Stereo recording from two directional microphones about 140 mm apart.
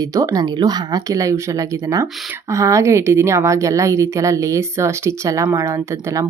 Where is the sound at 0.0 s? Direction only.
25° right (ahead or behind).